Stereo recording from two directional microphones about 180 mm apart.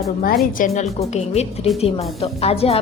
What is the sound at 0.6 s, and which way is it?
Speech, 45° left (ahead or behind).